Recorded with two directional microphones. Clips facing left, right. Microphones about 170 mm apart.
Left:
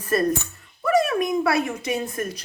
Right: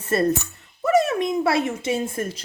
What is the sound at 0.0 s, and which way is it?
A woman's voice, 25° right (ahead or behind).